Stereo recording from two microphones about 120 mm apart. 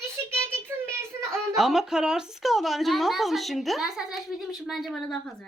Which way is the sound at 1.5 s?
Centre (ahead or behind).